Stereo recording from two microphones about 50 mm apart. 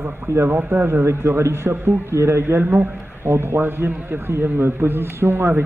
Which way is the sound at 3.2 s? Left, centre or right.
Right.